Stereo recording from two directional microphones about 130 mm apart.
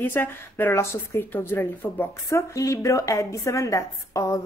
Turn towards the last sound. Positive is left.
turn(degrees=25)  # may be behind; listen again after turning